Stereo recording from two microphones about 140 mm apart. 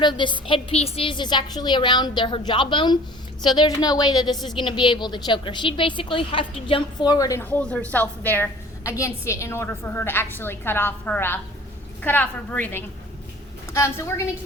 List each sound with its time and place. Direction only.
0.0 s a woman's voice: 35° left (ahead or behind)
7.4 s a woman's voice: 10° left (ahead or behind)